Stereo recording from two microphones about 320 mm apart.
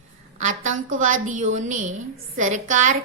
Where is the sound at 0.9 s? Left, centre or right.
Right.